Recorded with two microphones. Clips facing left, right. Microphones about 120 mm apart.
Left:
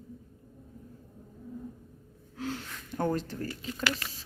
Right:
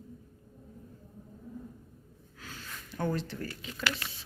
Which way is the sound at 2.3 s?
70° left (ahead or behind).